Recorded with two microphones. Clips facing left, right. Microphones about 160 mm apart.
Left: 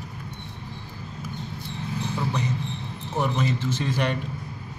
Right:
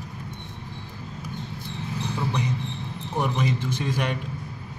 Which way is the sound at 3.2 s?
15° right (ahead or behind).